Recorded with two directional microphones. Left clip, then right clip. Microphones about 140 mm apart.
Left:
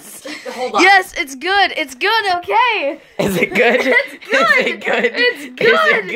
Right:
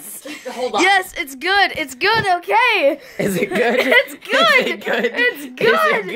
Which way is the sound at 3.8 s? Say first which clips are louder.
Even; 70° right (ahead or behind).